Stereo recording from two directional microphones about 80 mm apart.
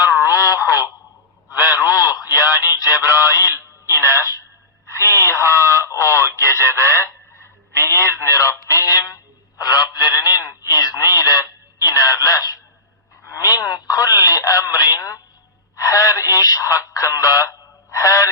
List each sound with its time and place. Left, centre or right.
0.0 s a sound: left
1.5 s radio: left
2.6 s a sound: left
3.9 s music: left
4.9 s radio: left
7.4 s telephone: left
10.7 s radio: left
11.9 s telephone: left
13.3 s radio: left